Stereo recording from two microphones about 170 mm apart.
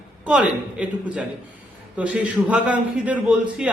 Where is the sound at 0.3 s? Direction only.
5° right (ahead or behind).